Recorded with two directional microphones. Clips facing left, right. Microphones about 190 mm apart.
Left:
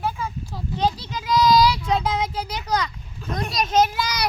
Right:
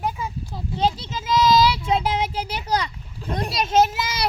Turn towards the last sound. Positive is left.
turn(degrees=-25)  # may be behind; listen again after turning